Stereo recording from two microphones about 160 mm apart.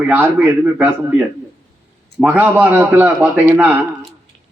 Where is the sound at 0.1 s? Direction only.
10° right (ahead or behind).